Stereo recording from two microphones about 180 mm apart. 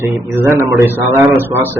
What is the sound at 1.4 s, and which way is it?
Speech, 10° right (ahead or behind).